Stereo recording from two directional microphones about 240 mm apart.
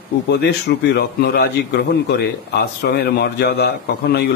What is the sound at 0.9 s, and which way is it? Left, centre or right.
A man's voice, left.